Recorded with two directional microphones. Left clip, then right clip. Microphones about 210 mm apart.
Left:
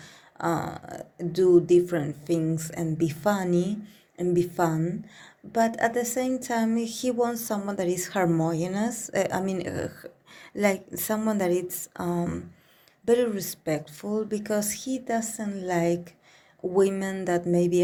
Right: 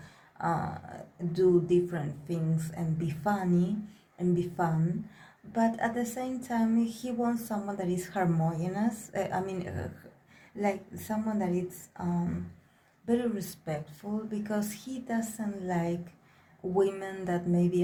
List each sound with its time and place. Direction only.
0.3 s a woman's voice: 40° left (ahead or behind)
13.1 s a woman's voice: 40° left (ahead or behind)